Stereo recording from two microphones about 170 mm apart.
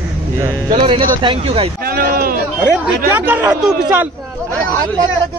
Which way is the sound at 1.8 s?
60° right (ahead or behind).